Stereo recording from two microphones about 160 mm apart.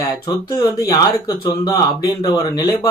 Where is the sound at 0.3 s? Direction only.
25° left (ahead or behind).